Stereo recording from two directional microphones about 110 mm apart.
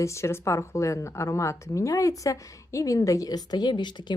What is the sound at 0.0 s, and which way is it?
Speech, 25° left (ahead or behind).